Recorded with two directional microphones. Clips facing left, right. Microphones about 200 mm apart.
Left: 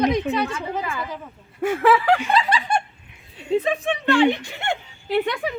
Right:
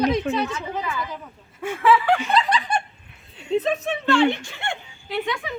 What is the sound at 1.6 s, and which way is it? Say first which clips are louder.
Speech: left 2 dB; 40° left (ahead or behind).